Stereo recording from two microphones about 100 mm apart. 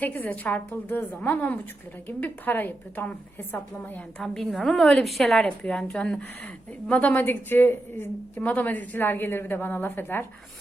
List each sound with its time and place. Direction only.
0.0 s a woman's voice: 15° left (ahead or behind)
4.2 s a woman's voice: 5° left (ahead or behind); by 10.2 s 20° left (ahead or behind)